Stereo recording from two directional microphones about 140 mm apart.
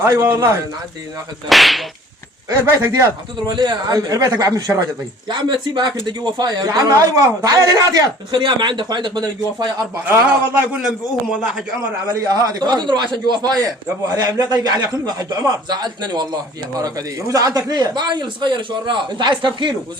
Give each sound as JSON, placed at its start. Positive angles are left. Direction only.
{"t": 0.0, "sound": "a man's voice", "side_deg": -20}
{"t": 1.5, "sound": "whip", "side_deg": 0}
{"t": 2.5, "sound": "a man's voice", "side_deg": -20}
{"t": 10.5, "sound": "a man's voice", "side_deg": -10}
{"t": 12.0, "sound": "a man's voice", "side_deg": -25}